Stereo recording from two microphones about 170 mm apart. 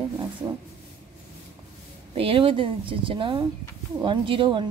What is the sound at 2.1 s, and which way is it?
Speech, 30° right (ahead or behind).